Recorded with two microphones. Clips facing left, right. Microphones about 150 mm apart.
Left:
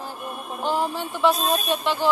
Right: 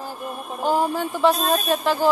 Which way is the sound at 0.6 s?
45° right (ahead or behind).